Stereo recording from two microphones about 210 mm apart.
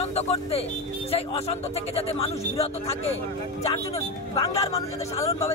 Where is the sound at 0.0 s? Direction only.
30° left (ahead or behind).